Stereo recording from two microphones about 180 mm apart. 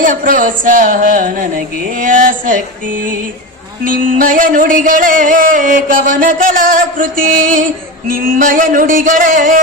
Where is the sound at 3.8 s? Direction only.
50° right (ahead or behind).